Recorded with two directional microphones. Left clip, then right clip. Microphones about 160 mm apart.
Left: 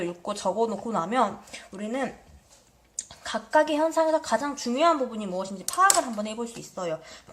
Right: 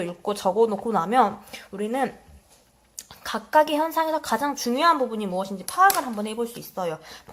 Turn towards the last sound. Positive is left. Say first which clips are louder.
# right 2 dB
turn(degrees=-35)  # may be behind; listen again after turning